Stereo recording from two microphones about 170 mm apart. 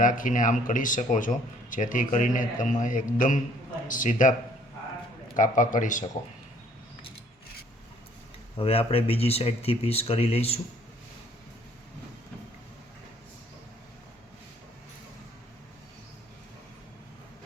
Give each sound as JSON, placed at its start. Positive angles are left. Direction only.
{"t": 0.0, "sound": "speech", "side_deg": 50}
{"t": 5.4, "sound": "speech", "side_deg": 50}
{"t": 8.5, "sound": "speech", "side_deg": 35}